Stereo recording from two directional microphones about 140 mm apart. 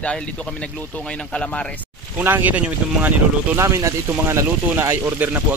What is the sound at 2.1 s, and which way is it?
Speech, 10° right (ahead or behind).